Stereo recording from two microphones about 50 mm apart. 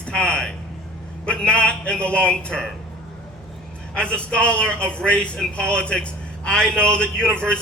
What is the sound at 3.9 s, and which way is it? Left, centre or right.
A man's voice, left.